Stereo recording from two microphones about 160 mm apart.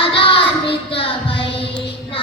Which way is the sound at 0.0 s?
35° left (ahead or behind).